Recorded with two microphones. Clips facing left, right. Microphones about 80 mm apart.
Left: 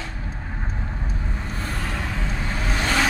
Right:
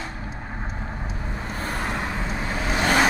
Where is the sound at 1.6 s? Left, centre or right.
Right.